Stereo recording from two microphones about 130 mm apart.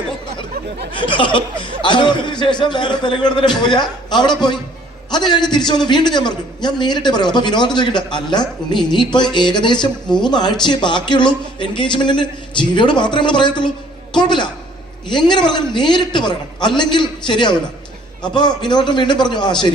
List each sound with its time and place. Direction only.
0.9 s a man's voice: 40° left (ahead or behind)